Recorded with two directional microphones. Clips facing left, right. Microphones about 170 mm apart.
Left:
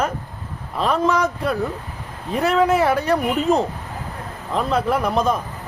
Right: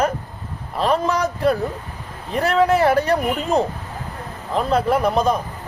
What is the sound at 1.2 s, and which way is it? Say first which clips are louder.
Speech: right 3 dB; 35° right (ahead or behind).